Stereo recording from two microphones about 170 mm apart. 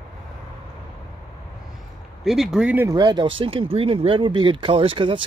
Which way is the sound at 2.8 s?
25° right (ahead or behind).